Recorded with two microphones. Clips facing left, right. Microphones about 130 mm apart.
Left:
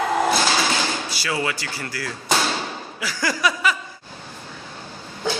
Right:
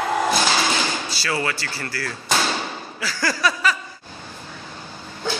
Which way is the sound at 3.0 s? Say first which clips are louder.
Even; 15° left (ahead or behind).